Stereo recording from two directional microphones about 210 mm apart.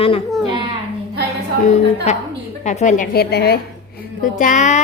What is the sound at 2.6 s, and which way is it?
A woman's voice, 35° left (ahead or behind).